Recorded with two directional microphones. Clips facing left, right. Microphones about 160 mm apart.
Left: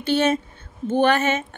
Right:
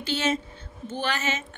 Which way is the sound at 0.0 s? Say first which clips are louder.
Left 7 dB; 55° left (ahead or behind).